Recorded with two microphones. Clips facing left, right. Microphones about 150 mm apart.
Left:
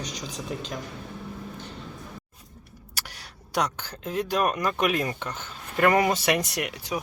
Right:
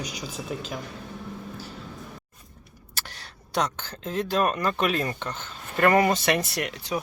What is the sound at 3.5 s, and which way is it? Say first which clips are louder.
Speech: even; 10° left (ahead or behind).